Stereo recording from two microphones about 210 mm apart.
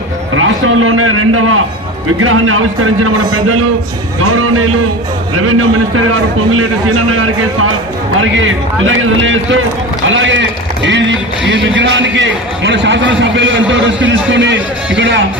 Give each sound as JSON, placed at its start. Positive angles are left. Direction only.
{"t": 0.3, "sound": "a man's voice", "side_deg": -80}
{"t": 8.4, "sound": "a man's voice", "side_deg": -65}
{"t": 11.4, "sound": "a man's voice", "side_deg": -55}